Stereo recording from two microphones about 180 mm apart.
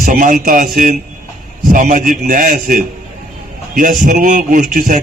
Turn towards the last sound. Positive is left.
turn(degrees=-50)  # may be behind; listen again after turning